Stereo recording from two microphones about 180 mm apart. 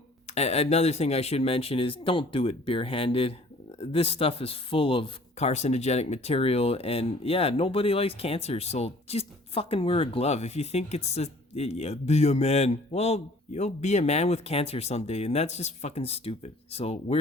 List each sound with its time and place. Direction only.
0.3 s speech: 35° left (ahead or behind)